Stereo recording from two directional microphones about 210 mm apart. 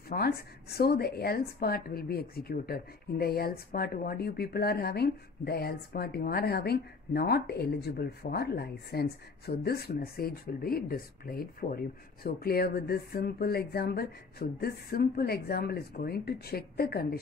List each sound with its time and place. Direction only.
0.1 s speech: 50° left (ahead or behind)